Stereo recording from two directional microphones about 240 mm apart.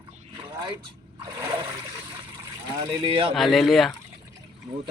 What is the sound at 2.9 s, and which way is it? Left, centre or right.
Speech, right.